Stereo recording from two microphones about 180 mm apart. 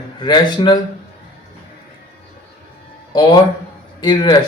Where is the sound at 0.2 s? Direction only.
25° left (ahead or behind).